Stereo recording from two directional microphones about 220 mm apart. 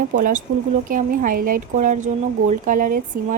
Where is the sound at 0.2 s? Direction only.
35° right (ahead or behind).